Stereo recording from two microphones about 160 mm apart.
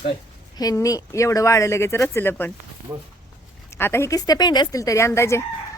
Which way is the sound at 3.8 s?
15° left (ahead or behind).